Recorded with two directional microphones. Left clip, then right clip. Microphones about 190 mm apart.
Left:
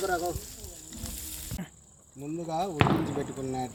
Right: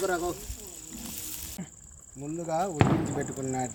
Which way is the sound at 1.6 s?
5° left (ahead or behind).